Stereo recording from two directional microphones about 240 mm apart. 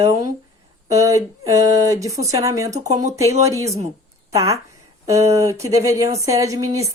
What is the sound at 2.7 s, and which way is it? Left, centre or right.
Speech, right.